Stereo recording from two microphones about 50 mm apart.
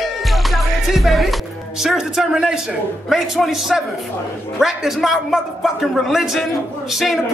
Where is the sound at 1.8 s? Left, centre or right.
Centre.